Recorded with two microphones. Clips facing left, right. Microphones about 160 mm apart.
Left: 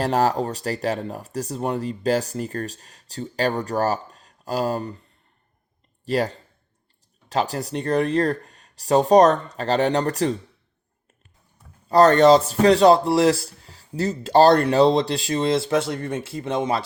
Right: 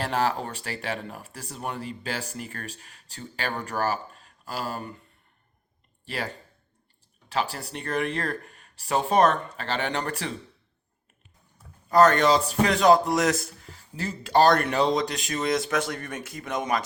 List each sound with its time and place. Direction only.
0.0 s speech: 40° left (ahead or behind)
6.1 s speech: 40° left (ahead or behind)
11.9 s speech: 35° left (ahead or behind)